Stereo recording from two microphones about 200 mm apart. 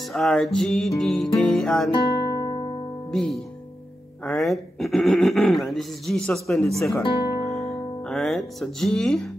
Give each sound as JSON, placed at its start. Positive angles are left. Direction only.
{"t": 0.1, "sound": "speech", "side_deg": 0}
{"t": 2.0, "sound": "music", "side_deg": 20}
{"t": 3.1, "sound": "speech", "side_deg": 0}
{"t": 8.1, "sound": "speech", "side_deg": 0}